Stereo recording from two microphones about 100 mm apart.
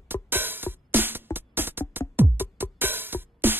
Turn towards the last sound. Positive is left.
turn(degrees=-20)  # may be behind; listen again after turning